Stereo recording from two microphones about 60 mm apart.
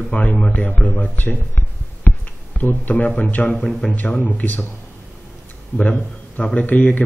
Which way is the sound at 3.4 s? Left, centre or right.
Centre.